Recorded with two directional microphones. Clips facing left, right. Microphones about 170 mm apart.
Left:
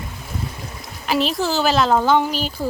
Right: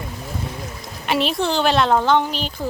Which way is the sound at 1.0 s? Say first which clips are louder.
Even; centre (ahead or behind).